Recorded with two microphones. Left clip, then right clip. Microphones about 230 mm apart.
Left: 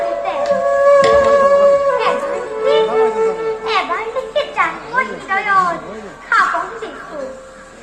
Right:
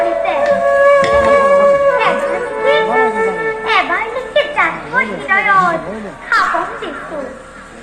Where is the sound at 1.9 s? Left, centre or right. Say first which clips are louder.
Right 3 dB; left.